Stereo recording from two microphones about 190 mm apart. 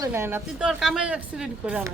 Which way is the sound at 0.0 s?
10° right (ahead or behind).